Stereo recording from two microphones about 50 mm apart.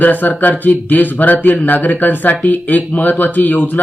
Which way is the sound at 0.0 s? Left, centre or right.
Left.